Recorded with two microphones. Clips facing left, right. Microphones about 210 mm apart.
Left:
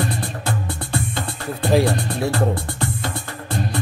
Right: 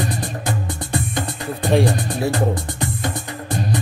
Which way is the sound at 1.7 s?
Centre (ahead or behind).